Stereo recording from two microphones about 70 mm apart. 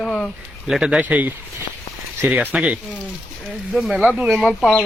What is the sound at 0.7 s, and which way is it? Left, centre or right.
Speech, centre.